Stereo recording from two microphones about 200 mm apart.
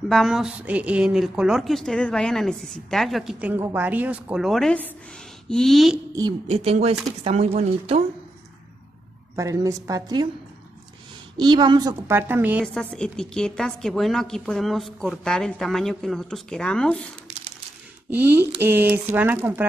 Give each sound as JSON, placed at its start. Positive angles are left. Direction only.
{"t": 0.1, "sound": "a woman's voice", "side_deg": 0}
{"t": 6.4, "sound": "speech", "side_deg": -30}
{"t": 9.3, "sound": "a woman's voice", "side_deg": -15}
{"t": 11.3, "sound": "a woman's voice", "side_deg": -20}
{"t": 12.7, "sound": "a woman's voice", "side_deg": 5}
{"t": 18.1, "sound": "a woman's voice", "side_deg": -10}